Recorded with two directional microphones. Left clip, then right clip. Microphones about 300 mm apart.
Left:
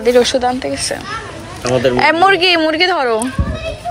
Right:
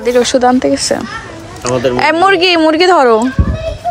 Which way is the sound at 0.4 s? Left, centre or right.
Right.